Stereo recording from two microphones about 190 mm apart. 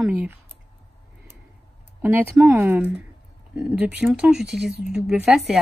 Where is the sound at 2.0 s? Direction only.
15° right (ahead or behind).